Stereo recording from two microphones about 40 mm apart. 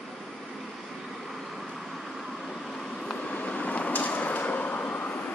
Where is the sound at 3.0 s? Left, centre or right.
Left.